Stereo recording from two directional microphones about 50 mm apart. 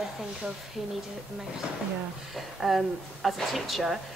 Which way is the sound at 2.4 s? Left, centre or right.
Centre.